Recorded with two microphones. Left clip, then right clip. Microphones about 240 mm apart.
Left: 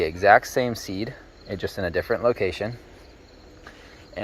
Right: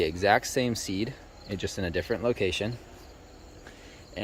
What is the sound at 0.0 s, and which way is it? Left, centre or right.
Speech, centre.